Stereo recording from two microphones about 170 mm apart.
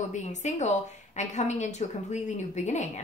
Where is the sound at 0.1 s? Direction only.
45° left (ahead or behind).